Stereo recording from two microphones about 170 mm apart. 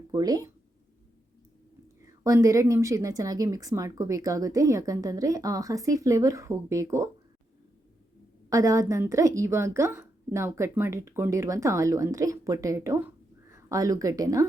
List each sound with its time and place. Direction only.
0.1 s speech: 20° right (ahead or behind)
2.0 s a woman's voice: 20° right (ahead or behind)
8.4 s a woman's voice: 20° right (ahead or behind)